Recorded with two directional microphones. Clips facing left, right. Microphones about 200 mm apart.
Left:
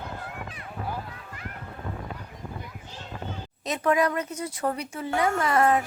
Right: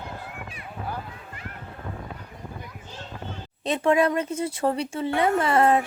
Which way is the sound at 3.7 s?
25° right (ahead or behind).